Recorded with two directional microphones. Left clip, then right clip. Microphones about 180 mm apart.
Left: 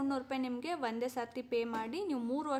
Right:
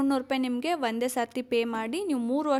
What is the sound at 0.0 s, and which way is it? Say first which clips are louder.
A woman's voice: right 9 dB; 40° right (ahead or behind).